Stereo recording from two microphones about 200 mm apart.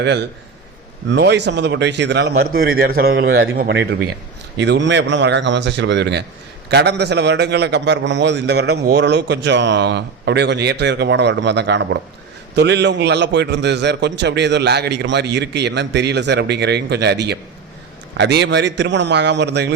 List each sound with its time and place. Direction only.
0.0 s a man's voice: 55° right (ahead or behind)
2.4 s a man's voice: 50° right (ahead or behind)